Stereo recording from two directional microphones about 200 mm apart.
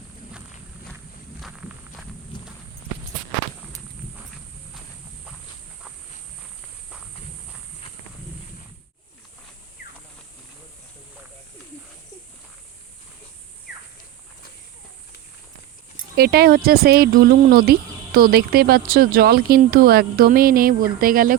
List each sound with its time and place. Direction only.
1.4 s walk: centre (ahead or behind)
16.1 s speech: 50° right (ahead or behind)